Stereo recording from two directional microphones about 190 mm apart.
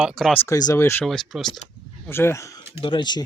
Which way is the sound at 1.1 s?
Centre (ahead or behind).